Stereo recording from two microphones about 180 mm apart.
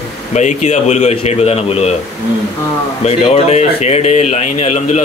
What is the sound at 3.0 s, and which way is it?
Speech, 35° left (ahead or behind).